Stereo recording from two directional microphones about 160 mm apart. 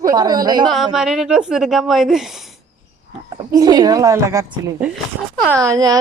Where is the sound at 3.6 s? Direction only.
25° right (ahead or behind).